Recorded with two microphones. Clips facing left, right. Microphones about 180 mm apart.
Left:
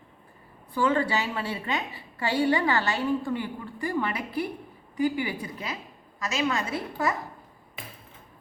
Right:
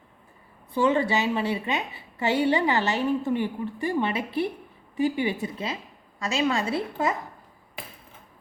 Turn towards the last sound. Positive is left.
turn(degrees=-25)  # may be behind; listen again after turning